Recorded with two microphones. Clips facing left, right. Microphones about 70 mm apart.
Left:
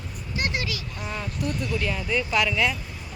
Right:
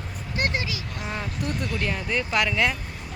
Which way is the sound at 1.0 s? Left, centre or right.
Right.